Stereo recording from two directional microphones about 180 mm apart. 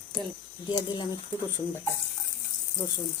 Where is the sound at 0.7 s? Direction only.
25° left (ahead or behind).